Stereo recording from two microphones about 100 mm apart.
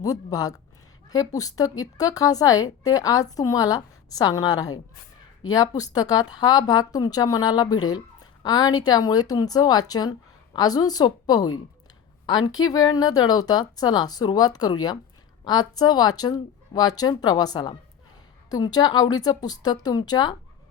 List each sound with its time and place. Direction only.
0.0 s speech: 35° left (ahead or behind)